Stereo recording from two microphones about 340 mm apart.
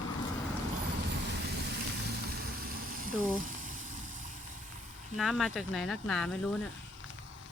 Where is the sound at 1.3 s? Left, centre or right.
Right.